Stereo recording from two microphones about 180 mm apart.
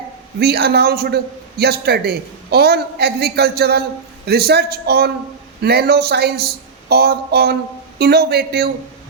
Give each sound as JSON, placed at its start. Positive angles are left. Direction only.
{"t": 0.3, "sound": "a man's voice", "side_deg": -65}